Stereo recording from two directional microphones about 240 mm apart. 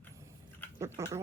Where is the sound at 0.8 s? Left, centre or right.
Centre.